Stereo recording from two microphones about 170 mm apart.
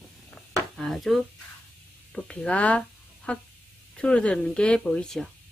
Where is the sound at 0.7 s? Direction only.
Centre (ahead or behind).